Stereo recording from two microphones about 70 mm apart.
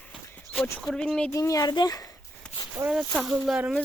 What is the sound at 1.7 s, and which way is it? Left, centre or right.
Speech, left.